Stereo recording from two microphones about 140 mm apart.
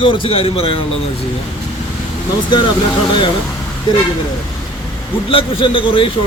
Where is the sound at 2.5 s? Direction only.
35° left (ahead or behind).